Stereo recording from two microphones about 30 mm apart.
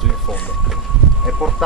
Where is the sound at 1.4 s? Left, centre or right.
Centre.